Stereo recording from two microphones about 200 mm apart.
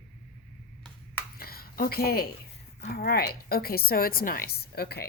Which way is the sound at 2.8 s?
50° left (ahead or behind).